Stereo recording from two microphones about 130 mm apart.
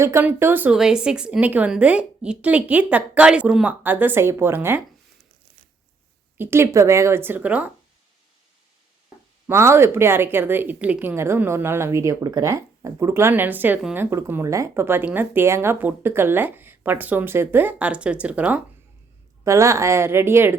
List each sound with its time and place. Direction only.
0.0 s speech: 20° right (ahead or behind)
6.3 s speech: 20° right (ahead or behind)
9.5 s speech: 20° right (ahead or behind)
19.5 s speech: 25° right (ahead or behind)